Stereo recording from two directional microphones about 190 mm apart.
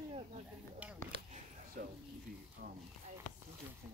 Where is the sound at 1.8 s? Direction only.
45° right (ahead or behind).